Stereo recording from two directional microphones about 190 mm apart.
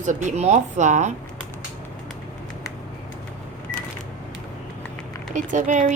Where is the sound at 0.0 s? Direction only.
40° right (ahead or behind).